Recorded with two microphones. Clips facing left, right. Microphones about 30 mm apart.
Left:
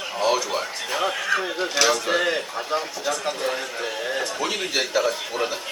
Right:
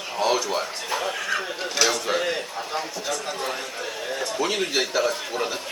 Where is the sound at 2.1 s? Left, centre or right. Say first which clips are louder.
Left 3 dB; centre.